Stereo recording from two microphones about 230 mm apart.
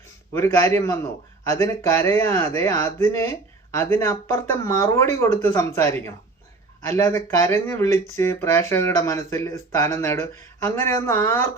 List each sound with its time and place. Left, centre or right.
0.3 s speech: centre